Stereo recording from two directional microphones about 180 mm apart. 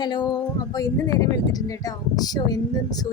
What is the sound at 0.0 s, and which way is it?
A woman's voice, 25° left (ahead or behind).